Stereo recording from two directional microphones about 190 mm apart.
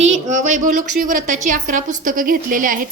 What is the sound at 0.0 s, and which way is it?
A woman's voice, 40° right (ahead or behind).